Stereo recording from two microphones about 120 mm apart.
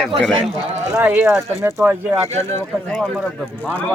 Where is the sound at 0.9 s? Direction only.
15° right (ahead or behind).